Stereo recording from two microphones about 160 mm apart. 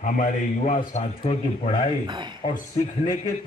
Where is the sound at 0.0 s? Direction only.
55° left (ahead or behind); by 2.0 s 35° left (ahead or behind).